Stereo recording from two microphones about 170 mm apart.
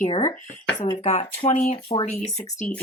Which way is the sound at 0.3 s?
50° left (ahead or behind).